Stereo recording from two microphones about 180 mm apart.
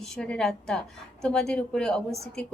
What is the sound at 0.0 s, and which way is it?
Speech, 5° left (ahead or behind).